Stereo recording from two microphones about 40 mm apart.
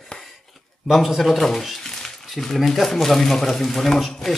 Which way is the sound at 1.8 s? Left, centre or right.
Centre.